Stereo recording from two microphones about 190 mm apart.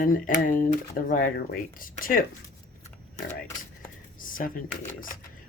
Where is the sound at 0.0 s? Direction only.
45° left (ahead or behind).